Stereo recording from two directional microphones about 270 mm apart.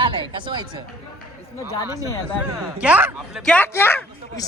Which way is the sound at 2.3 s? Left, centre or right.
Centre.